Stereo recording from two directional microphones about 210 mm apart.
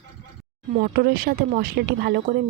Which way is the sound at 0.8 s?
45° right (ahead or behind).